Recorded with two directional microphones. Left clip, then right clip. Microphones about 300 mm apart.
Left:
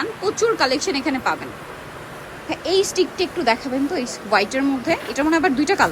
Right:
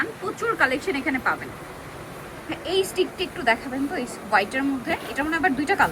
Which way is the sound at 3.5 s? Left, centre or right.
Centre.